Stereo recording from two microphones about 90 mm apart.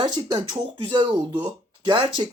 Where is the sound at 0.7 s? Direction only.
75° right (ahead or behind).